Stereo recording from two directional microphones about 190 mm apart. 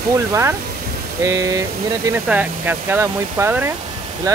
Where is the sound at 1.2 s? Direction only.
15° right (ahead or behind).